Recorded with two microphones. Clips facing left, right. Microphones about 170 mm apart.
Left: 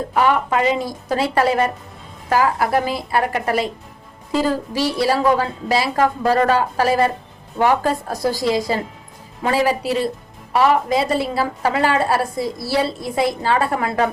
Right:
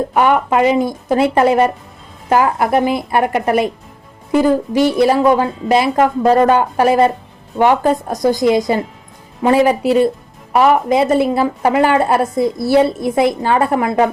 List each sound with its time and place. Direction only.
0.1 s a woman's voice: 20° right (ahead or behind)